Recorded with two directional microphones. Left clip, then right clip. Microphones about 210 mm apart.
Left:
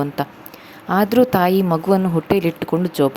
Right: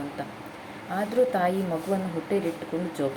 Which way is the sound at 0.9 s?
50° left (ahead or behind).